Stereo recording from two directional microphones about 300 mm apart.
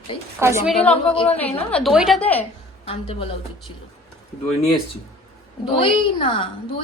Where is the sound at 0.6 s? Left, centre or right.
Centre.